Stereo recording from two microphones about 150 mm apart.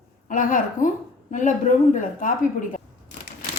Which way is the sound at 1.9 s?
60° left (ahead or behind).